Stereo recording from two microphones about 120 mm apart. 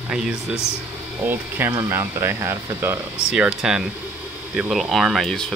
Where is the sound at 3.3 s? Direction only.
5° right (ahead or behind).